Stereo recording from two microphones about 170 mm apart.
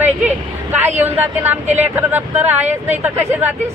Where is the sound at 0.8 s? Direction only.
10° right (ahead or behind).